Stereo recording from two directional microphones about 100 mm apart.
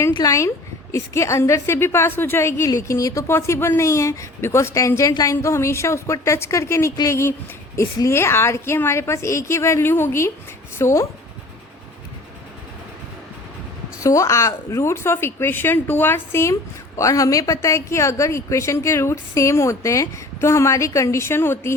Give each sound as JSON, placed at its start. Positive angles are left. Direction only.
{"t": 0.1, "sound": "a woman's voice", "side_deg": 35}
{"t": 14.0, "sound": "a woman's voice", "side_deg": 30}